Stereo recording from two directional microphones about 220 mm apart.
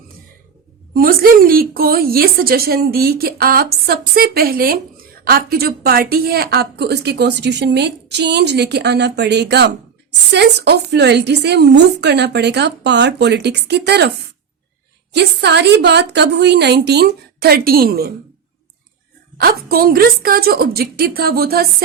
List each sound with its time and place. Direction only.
0.9 s a woman's voice: 40° right (ahead or behind)
15.1 s a woman's voice: 50° right (ahead or behind)
19.4 s a woman's voice: 40° right (ahead or behind)